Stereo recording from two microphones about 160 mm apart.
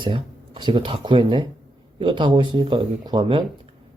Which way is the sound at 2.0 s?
30° right (ahead or behind).